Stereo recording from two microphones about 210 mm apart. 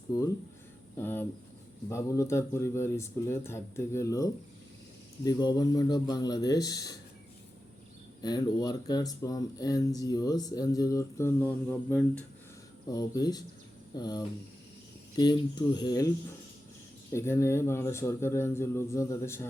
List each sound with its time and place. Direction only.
0.1 s speech: 15° left (ahead or behind)
8.2 s speech: 20° left (ahead or behind)